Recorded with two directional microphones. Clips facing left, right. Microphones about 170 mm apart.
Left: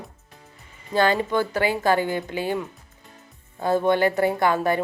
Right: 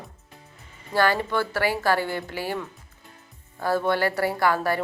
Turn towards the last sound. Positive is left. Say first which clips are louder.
# left 2 dB
turn(degrees=20)  # may be behind; listen again after turning